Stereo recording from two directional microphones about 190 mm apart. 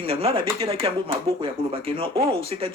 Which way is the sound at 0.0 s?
30° right (ahead or behind).